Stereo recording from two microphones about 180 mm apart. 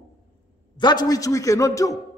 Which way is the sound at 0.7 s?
25° left (ahead or behind).